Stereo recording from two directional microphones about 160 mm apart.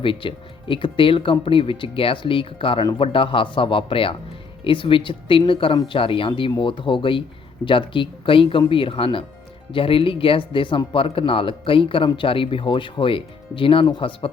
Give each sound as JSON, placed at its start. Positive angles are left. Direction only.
{"t": 0.0, "sound": "speech", "side_deg": 35}